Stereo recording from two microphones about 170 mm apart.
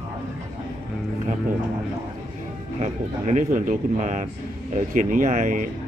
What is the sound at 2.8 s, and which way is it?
Speech, 45° right (ahead or behind).